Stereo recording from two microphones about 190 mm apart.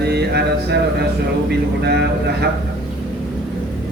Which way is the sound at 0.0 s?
60° right (ahead or behind).